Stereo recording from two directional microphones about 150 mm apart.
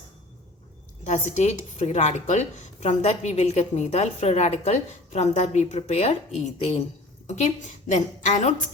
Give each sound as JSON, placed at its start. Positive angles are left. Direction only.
{"t": 1.0, "sound": "a woman's voice", "side_deg": 50}